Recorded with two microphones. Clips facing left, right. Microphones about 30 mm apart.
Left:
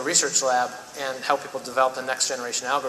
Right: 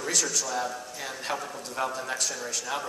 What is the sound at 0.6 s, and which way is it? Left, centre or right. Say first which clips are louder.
A man's voice: left 6 dB; left.